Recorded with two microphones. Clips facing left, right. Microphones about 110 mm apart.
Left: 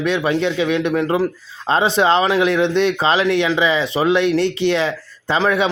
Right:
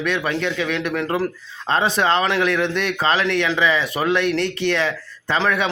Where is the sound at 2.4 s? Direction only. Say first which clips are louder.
Left 5 dB; 30° left (ahead or behind).